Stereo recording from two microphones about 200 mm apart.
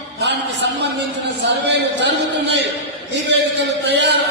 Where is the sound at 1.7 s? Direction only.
60° right (ahead or behind).